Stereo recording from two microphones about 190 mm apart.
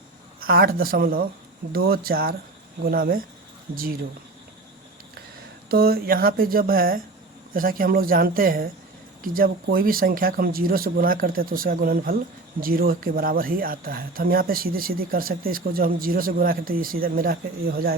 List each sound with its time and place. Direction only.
0.3 s speech: 50° right (ahead or behind)
5.6 s speech: 55° right (ahead or behind)